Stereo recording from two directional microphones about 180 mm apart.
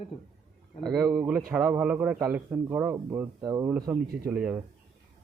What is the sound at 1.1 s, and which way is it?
A man's voice, 5° right (ahead or behind).